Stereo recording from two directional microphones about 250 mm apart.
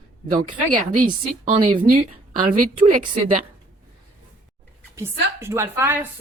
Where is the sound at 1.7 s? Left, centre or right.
Right.